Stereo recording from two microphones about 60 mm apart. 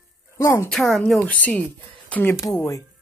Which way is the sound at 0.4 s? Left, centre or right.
Left.